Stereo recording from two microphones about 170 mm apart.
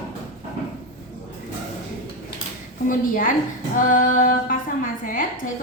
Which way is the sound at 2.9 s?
55° left (ahead or behind).